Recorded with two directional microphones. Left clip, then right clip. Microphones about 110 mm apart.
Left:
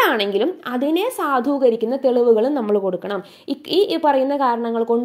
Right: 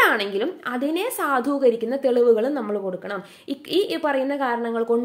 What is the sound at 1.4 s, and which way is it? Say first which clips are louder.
A woman's voice: left 3 dB; 15° left (ahead or behind).